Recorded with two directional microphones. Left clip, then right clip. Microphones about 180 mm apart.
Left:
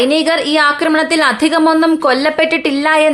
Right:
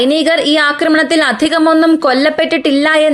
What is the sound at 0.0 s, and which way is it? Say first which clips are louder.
A woman's voice: right 1 dB; 20° right (ahead or behind).